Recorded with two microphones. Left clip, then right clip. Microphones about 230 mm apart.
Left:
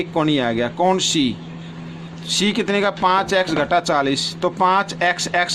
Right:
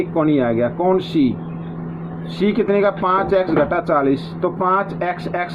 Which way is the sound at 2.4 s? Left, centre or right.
Left.